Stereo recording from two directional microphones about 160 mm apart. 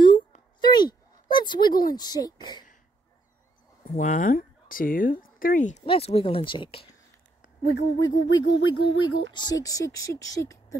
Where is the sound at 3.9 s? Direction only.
55° left (ahead or behind).